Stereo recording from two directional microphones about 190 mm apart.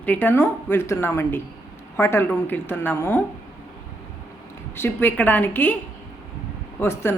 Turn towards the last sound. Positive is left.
turn(degrees=15)  # may be behind; listen again after turning